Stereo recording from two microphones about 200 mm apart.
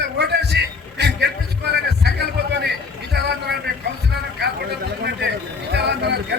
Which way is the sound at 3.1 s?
55° right (ahead or behind).